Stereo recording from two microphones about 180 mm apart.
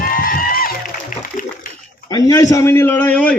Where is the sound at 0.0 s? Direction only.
50° left (ahead or behind).